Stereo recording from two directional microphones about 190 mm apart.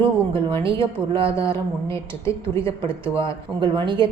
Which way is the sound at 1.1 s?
30° right (ahead or behind).